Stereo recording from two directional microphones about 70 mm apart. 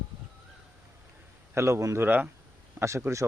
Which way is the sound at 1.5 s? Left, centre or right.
Right.